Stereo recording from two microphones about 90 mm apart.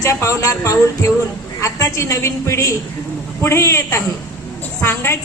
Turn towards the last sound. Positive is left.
turn(degrees=25)  # may be behind; listen again after turning